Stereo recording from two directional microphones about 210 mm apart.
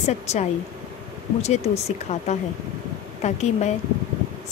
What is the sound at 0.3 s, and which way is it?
A woman's voice, 30° left (ahead or behind).